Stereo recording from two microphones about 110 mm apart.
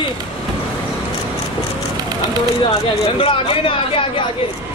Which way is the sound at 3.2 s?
55° left (ahead or behind).